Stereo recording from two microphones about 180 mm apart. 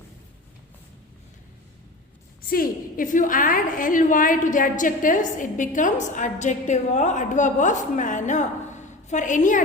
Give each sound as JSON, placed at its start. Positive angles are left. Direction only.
{"t": 2.5, "sound": "a woman's voice", "side_deg": 50}